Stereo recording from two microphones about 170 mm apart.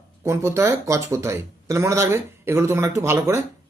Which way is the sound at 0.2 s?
15° right (ahead or behind).